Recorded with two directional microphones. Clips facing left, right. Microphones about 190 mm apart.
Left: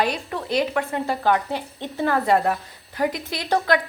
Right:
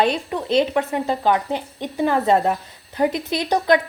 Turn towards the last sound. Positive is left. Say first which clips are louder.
# right 3 dB
turn(degrees=-20)  # may be behind; listen again after turning